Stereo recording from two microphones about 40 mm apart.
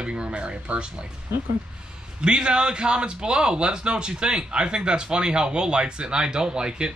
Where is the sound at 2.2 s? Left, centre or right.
Right.